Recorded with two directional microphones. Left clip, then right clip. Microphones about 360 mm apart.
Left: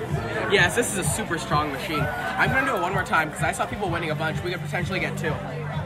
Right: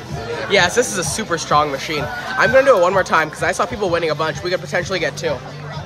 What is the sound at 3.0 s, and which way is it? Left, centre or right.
Speech, right.